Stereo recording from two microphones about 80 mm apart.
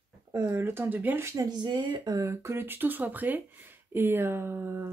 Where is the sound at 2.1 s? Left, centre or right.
Right.